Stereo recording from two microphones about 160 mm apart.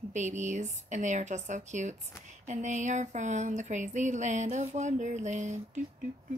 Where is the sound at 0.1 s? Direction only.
50° right (ahead or behind).